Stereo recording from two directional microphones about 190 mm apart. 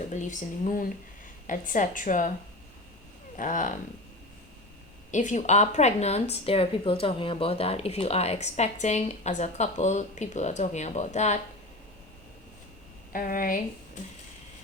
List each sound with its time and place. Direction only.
0.1 s speech: 40° left (ahead or behind)
3.3 s speech: 45° left (ahead or behind)
5.1 s speech: 40° left (ahead or behind)
13.1 s speech: 45° left (ahead or behind)